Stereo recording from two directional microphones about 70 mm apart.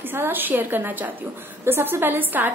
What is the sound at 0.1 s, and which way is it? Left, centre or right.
A woman's voice, right.